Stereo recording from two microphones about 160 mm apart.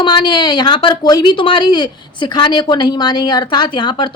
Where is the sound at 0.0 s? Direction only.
30° left (ahead or behind).